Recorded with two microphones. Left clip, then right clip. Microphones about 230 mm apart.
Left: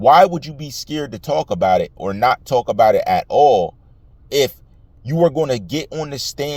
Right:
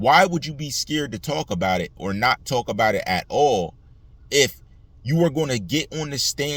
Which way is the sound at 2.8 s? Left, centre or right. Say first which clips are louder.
Left 8 dB; centre.